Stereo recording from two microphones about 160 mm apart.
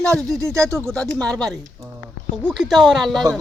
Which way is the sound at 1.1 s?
5° left (ahead or behind).